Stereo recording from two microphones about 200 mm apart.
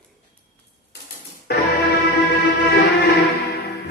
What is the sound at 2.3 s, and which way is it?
Music, 55° left (ahead or behind).